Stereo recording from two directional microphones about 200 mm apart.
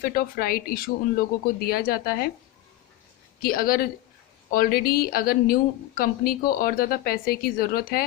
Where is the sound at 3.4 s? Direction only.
50° left (ahead or behind).